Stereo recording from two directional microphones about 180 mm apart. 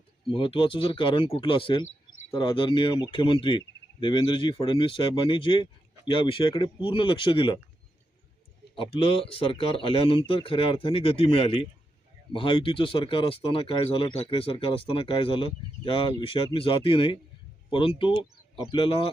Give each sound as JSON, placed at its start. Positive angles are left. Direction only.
{"t": 0.3, "sound": "speech", "side_deg": 30}
{"t": 8.7, "sound": "speech", "side_deg": 30}